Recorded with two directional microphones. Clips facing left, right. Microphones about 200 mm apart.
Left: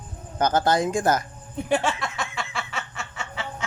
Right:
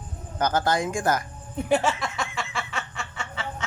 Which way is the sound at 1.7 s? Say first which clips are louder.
Right 1 dB; centre (ahead or behind).